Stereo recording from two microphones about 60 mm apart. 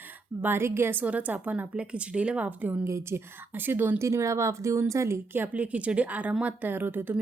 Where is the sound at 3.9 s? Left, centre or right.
Right.